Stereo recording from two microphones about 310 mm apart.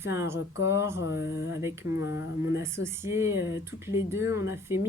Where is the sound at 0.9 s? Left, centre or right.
Left.